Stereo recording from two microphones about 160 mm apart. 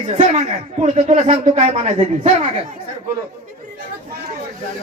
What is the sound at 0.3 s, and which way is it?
A man's voice, 45° right (ahead or behind).